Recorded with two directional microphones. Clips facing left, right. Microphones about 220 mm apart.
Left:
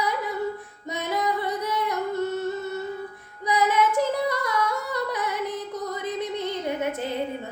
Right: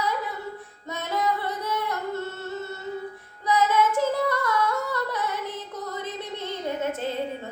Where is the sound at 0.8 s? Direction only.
15° left (ahead or behind).